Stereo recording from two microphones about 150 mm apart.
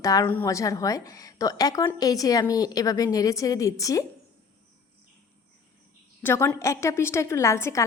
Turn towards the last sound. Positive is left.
turn(degrees=20)  # may be behind; listen again after turning